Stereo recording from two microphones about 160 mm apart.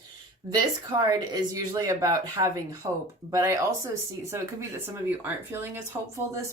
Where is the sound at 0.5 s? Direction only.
25° right (ahead or behind).